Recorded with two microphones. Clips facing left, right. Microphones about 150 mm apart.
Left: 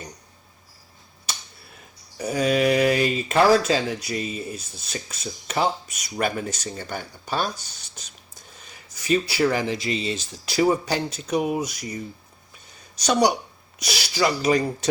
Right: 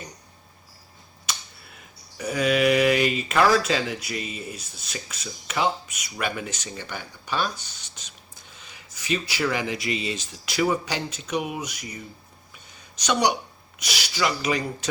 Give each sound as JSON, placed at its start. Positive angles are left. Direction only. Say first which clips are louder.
{"t": 2.1, "sound": "speech", "louder": "left 1 dB", "side_deg": 35}
{"t": 13.8, "sound": "speech", "louder": "left 3 dB", "side_deg": 35}